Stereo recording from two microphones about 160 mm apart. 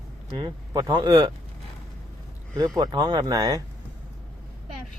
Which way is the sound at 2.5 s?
25° right (ahead or behind).